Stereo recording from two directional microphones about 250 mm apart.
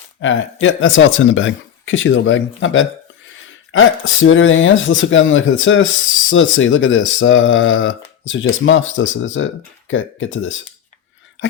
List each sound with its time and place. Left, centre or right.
0.2 s speech: left